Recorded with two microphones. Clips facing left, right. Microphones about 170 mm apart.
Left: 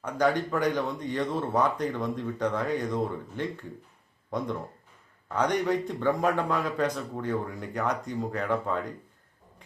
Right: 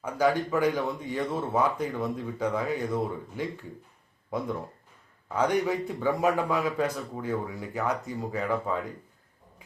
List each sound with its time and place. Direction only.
0.0 s a man's voice: 5° right (ahead or behind)